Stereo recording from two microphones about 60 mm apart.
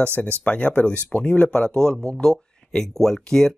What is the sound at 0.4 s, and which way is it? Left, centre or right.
Speech, left.